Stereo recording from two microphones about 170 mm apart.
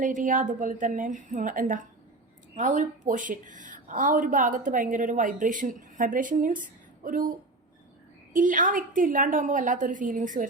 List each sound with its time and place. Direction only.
0.0 s a woman's voice: 50° right (ahead or behind)